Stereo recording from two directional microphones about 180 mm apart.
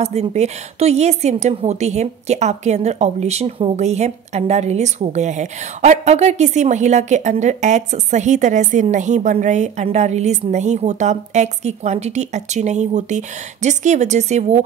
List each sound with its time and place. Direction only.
0.0 s a woman's voice: 35° right (ahead or behind)